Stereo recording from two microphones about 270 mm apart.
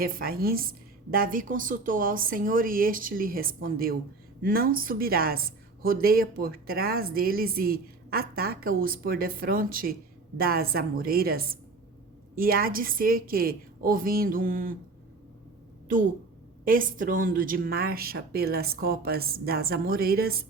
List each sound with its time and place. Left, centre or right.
0.0 s a woman's voice: right
16.6 s a woman's voice: right